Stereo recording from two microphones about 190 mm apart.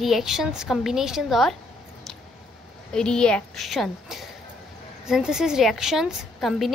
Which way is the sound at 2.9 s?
5° left (ahead or behind).